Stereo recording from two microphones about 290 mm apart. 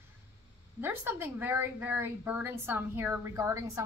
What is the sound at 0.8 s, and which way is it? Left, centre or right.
A woman's voice, centre.